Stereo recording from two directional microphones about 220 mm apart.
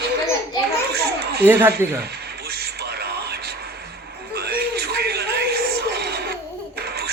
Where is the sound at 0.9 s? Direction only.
45° right (ahead or behind).